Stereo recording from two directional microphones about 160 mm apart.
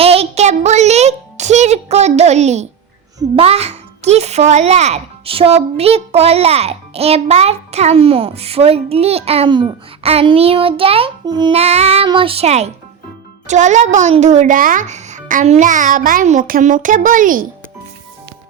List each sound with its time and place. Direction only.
0.0 s a child's voice: 40° right (ahead or behind)
11.5 s a child's voice: 40° right (ahead or behind); by 17.4 s 55° right (ahead or behind)